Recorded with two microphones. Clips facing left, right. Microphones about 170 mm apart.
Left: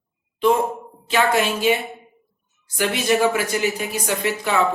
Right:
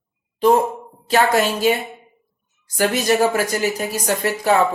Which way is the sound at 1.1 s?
40° right (ahead or behind).